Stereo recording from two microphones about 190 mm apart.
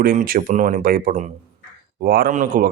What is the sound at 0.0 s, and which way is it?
Speech, 50° right (ahead or behind).